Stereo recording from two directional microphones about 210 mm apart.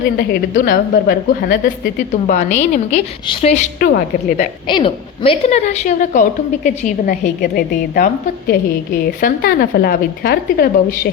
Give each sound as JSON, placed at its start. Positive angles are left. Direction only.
{"t": 0.2, "sound": "a woman's voice", "side_deg": 45}
{"t": 4.7, "sound": "a woman's voice", "side_deg": 25}